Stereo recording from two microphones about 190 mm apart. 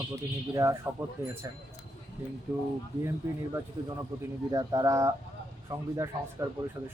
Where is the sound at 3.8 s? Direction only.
25° right (ahead or behind).